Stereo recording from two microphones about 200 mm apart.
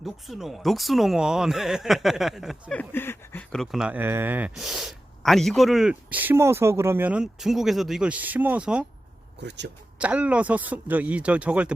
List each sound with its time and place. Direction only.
0.0 s speech: centre (ahead or behind)
9.4 s speech: 60° right (ahead or behind)
10.0 s speech: 5° right (ahead or behind)